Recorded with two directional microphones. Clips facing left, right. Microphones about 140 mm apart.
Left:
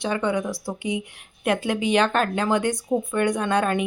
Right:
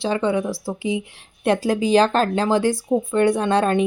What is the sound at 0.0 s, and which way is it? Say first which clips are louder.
Speech: right 3 dB; 25° right (ahead or behind).